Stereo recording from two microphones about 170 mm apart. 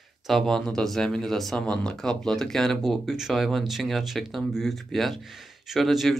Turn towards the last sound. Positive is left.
turn(degrees=0)  # may be behind; listen again after turning